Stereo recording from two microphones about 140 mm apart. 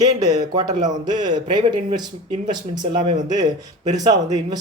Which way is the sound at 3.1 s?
60° right (ahead or behind).